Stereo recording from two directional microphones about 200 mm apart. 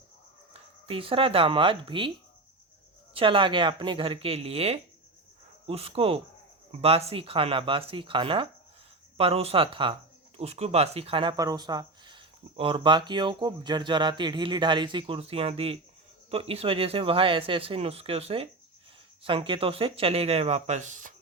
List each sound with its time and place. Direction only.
0.9 s speech: 25° right (ahead or behind)
3.2 s speech: 25° right (ahead or behind)